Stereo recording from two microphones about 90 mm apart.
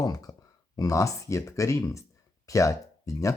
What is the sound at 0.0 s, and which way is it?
Speech, 45° left (ahead or behind).